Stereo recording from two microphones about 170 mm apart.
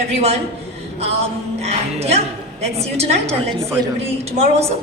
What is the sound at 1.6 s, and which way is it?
A man's voice, 40° right (ahead or behind).